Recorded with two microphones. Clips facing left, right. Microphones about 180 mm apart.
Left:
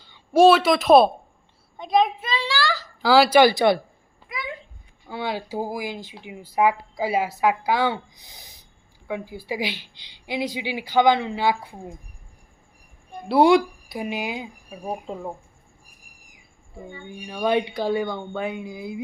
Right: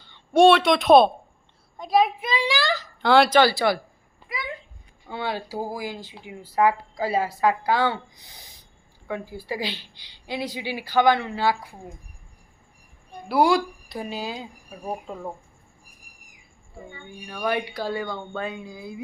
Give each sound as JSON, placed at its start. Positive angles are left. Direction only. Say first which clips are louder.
{"t": 0.1, "sound": "a child's voice", "louder": "left 1 dB", "side_deg": 0}
{"t": 2.2, "sound": "a child's voice", "louder": "right 1 dB", "side_deg": -15}
{"t": 3.0, "sound": "speech", "louder": "left 2 dB", "side_deg": 5}
{"t": 5.0, "sound": "speech", "louder": "left 1 dB", "side_deg": 10}
{"t": 13.2, "sound": "speech", "louder": "left 4 dB", "side_deg": 25}
{"t": 13.8, "sound": "speech", "louder": "left 3 dB", "side_deg": 10}
{"t": 17.1, "sound": "speech", "louder": "left 4 dB", "side_deg": 15}